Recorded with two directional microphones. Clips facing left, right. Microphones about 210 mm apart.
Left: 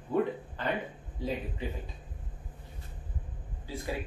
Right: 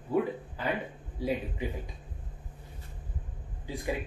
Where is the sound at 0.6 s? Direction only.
10° right (ahead or behind).